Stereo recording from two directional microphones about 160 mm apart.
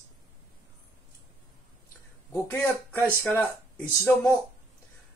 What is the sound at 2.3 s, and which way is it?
Speech, 15° left (ahead or behind).